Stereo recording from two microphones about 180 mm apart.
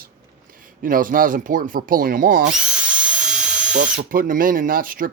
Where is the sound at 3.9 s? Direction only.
50° right (ahead or behind).